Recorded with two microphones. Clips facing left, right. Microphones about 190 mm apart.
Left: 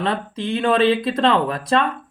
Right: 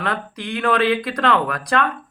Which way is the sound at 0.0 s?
25° left (ahead or behind).